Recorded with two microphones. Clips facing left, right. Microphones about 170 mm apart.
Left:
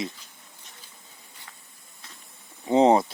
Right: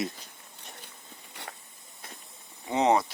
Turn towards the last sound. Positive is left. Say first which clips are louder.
# left 6 dB
turn(degrees=30)  # may be behind; listen again after turning